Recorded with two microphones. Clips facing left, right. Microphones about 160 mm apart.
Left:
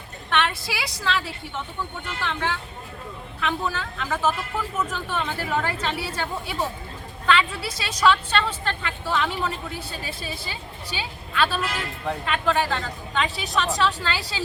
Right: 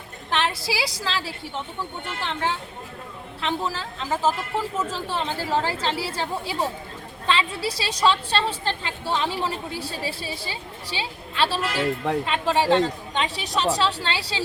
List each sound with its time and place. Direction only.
0.3 s a woman's voice: 30° right (ahead or behind)